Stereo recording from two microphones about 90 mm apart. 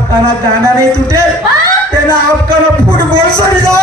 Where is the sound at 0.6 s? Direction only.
35° right (ahead or behind).